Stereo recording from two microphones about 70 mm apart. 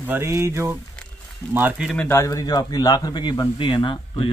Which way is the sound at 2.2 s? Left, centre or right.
Left.